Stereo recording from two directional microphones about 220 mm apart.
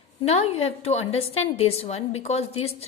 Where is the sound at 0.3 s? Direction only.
25° left (ahead or behind).